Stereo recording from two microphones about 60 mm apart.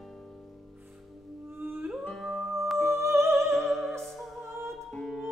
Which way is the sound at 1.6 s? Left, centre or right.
Right.